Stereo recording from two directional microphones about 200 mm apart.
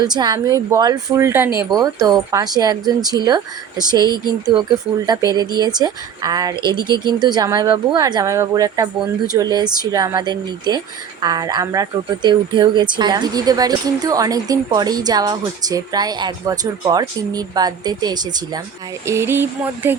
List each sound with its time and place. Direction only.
0.0 s a woman's voice: 20° right (ahead or behind)